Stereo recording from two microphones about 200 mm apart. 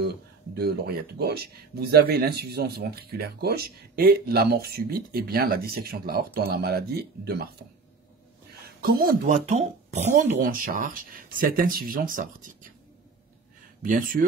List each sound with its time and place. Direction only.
0.6 s speech: 50° right (ahead or behind)
8.8 s speech: 45° right (ahead or behind)
13.8 s speech: 45° right (ahead or behind)